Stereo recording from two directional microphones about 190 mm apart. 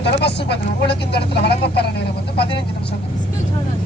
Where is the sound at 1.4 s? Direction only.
60° left (ahead or behind).